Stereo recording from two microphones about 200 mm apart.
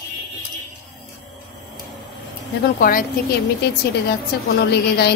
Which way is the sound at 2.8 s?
50° left (ahead or behind).